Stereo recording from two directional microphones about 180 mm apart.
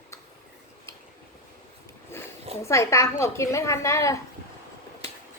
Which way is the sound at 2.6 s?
15° left (ahead or behind).